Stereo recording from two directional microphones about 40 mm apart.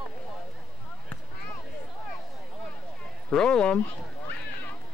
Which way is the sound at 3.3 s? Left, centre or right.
Left.